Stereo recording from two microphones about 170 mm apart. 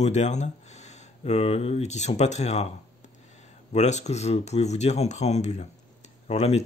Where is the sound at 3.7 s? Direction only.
40° left (ahead or behind).